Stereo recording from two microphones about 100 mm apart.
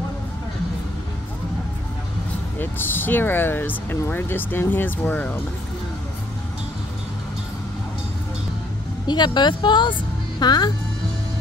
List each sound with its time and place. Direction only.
2.6 s speech: 20° left (ahead or behind)
9.0 s a woman's voice: 45° left (ahead or behind)